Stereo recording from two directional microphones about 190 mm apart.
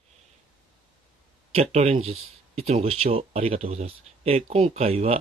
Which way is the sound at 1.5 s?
35° right (ahead or behind).